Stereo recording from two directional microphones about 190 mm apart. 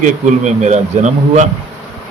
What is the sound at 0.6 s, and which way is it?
Speech, 40° right (ahead or behind).